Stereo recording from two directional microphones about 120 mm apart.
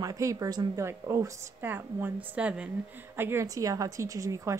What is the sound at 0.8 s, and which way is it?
A woman's voice, 20° right (ahead or behind).